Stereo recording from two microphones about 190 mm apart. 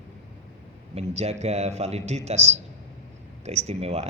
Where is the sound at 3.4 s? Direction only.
35° right (ahead or behind).